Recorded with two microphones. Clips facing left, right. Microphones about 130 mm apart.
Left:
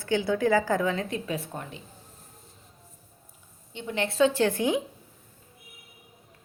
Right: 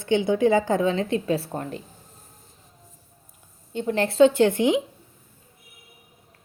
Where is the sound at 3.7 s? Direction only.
40° right (ahead or behind); by 4.8 s 20° right (ahead or behind).